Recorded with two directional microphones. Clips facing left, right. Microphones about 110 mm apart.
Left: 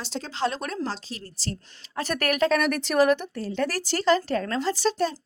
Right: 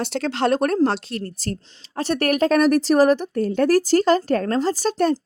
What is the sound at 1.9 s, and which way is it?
Speech, 35° right (ahead or behind).